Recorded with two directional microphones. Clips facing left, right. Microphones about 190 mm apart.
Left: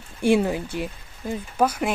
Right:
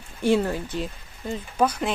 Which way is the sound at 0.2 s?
15° left (ahead or behind).